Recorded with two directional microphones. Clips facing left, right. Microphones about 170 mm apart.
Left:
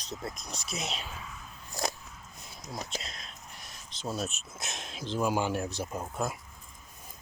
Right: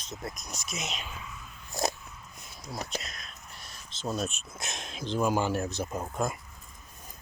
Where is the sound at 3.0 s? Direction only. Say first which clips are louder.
Even; 25° left (ahead or behind).